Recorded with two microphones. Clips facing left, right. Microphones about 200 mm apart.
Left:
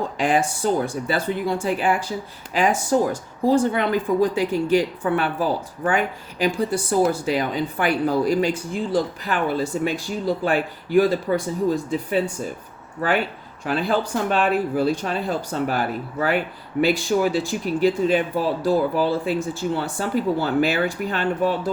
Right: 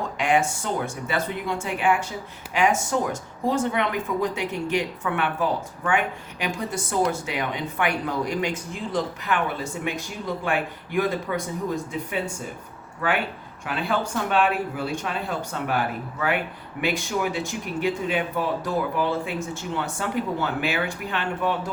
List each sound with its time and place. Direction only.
0.2 s speech: 35° left (ahead or behind)
13.7 s speech: 35° left (ahead or behind)